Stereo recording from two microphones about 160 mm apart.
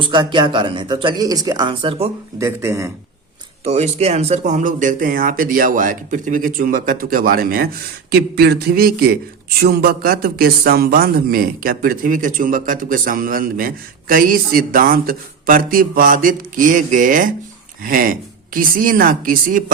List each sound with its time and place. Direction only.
0.0 s speech: 30° right (ahead or behind)
2.4 s speech: 20° right (ahead or behind)
3.6 s speech: 45° right (ahead or behind); by 7.7 s 65° right (ahead or behind)
8.1 s speech: 80° right; by 19.7 s 60° right (ahead or behind)